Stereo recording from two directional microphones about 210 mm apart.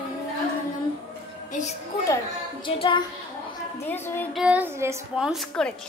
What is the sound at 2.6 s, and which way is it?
Speech, 25° left (ahead or behind).